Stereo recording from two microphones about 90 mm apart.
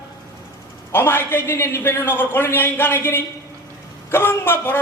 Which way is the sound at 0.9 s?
25° left (ahead or behind).